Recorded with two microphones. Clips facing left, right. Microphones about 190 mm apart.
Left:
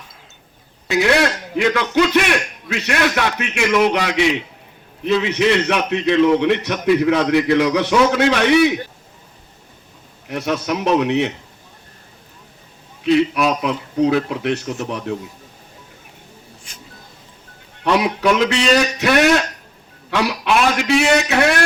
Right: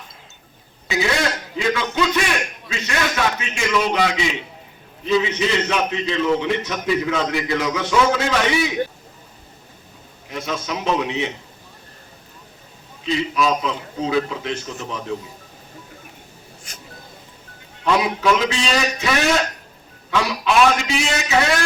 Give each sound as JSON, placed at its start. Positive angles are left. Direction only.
{"t": 0.9, "sound": "a man's voice", "side_deg": 65}
{"t": 10.2, "sound": "a man's voice", "side_deg": 65}
{"t": 13.0, "sound": "a man's voice", "side_deg": 65}
{"t": 17.8, "sound": "a man's voice", "side_deg": 65}